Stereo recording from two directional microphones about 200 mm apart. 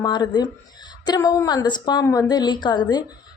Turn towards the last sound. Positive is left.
turn(degrees=20)  # may be behind; listen again after turning